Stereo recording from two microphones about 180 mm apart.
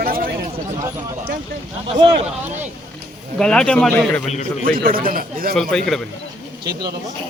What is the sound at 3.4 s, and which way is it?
Speech, 5° left (ahead or behind).